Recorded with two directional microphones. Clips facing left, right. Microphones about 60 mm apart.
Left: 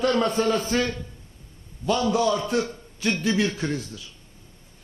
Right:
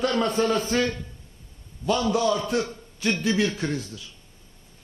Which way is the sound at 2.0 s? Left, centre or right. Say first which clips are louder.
Left 1 dB; left.